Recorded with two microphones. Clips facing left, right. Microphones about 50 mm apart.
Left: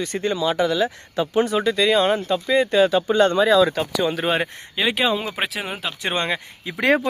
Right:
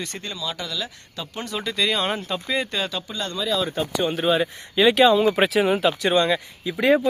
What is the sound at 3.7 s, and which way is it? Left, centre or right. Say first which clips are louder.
Speech: left 2 dB; left.